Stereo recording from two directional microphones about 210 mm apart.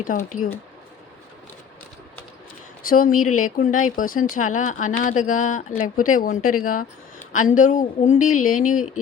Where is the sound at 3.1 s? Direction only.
90° left.